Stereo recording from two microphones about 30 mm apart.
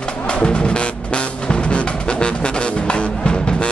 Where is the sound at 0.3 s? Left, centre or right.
Left.